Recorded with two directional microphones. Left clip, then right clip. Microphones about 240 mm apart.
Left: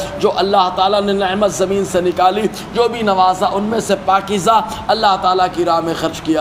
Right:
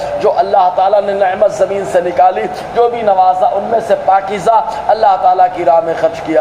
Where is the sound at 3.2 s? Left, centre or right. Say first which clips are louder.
Right 2 dB; left.